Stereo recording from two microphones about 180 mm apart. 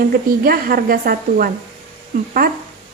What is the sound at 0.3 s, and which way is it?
A woman's voice, 55° right (ahead or behind).